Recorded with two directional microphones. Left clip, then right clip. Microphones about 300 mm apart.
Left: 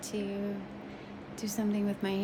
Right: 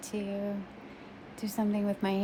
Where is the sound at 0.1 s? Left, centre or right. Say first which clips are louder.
Even; centre.